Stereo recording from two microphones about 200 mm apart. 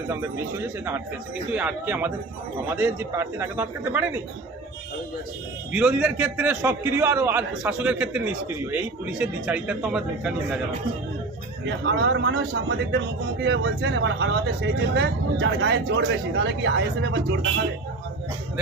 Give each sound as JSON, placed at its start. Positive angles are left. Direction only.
{"t": 0.1, "sound": "a man's voice", "side_deg": -10}
{"t": 5.7, "sound": "a man's voice", "side_deg": -5}
{"t": 11.6, "sound": "speech", "side_deg": -60}